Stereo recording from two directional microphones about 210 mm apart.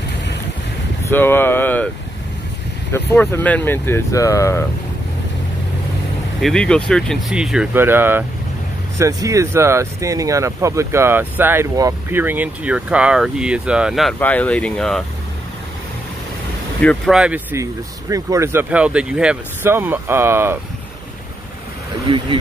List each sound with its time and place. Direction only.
1.0 s a sound: 10° left (ahead or behind)
2.9 s speech: 10° left (ahead or behind)
6.4 s speech: 5° left (ahead or behind)
16.8 s speech: 5° left (ahead or behind)
22.1 s speech: 25° right (ahead or behind)